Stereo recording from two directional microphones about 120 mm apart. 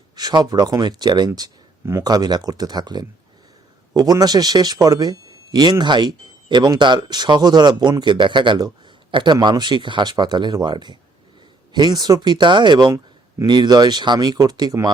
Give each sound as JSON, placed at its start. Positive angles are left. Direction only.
{"t": 0.2, "sound": "a man's voice", "side_deg": -35}